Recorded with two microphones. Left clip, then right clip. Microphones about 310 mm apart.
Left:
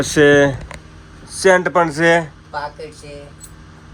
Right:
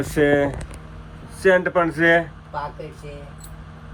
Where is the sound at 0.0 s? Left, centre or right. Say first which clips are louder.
Left 7 dB; left.